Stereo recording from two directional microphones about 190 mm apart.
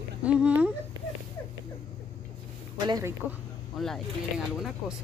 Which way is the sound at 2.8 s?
20° right (ahead or behind).